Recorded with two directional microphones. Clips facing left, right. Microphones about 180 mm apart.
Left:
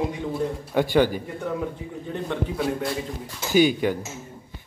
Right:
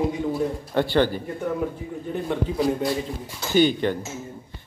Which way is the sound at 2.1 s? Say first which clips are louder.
Right 2 dB; 5° right (ahead or behind).